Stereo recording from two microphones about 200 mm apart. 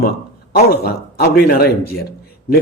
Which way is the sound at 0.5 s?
50° left (ahead or behind).